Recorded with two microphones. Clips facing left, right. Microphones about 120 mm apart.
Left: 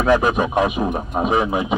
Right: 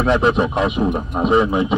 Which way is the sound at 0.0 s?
15° left (ahead or behind).